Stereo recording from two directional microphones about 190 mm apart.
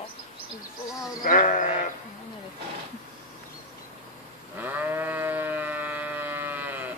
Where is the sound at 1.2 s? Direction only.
45° left (ahead or behind).